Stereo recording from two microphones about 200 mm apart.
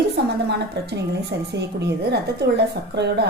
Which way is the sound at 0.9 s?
55° right (ahead or behind).